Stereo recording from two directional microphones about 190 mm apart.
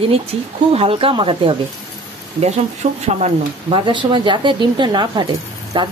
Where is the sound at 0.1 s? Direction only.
30° right (ahead or behind).